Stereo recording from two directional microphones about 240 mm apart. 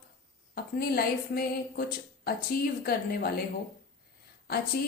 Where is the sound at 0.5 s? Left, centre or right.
Left.